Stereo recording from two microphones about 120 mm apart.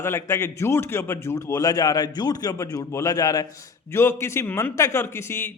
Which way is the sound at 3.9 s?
20° left (ahead or behind).